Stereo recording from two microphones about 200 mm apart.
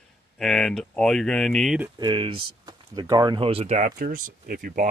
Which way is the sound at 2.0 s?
25° right (ahead or behind).